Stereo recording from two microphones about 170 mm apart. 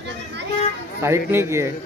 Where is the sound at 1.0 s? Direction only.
15° right (ahead or behind).